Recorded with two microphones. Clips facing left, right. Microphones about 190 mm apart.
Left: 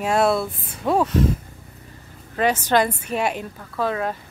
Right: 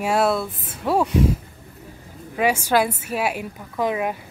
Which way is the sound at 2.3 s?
10° right (ahead or behind).